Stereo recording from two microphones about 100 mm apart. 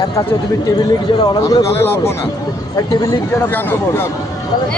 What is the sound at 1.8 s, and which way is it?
Speech, 25° left (ahead or behind).